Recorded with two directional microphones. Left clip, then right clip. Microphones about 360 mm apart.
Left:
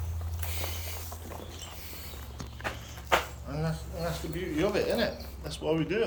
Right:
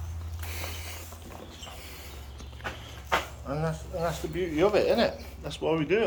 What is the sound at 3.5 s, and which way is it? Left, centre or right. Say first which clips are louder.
Speech: right 4 dB; centre.